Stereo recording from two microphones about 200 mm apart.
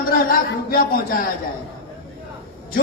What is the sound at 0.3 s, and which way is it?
Speech, 45° left (ahead or behind).